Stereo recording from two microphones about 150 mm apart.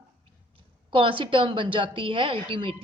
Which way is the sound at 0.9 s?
35° right (ahead or behind).